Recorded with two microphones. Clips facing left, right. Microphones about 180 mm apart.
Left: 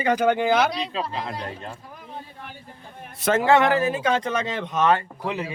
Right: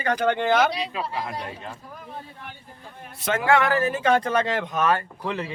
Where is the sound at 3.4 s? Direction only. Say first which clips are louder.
Left 2 dB; 25° left (ahead or behind).